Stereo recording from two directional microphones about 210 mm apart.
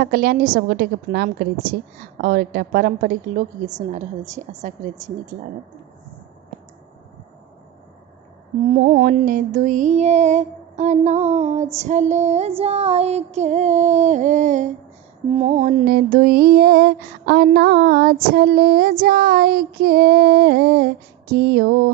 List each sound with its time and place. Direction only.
0.0 s child singing: 45° right (ahead or behind)
3.9 s music: 35° right (ahead or behind)
8.8 s music: 40° right (ahead or behind)
15.8 s child singing: 45° right (ahead or behind)